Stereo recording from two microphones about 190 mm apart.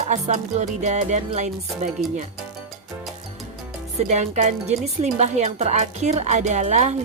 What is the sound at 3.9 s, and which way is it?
Speech, 35° right (ahead or behind).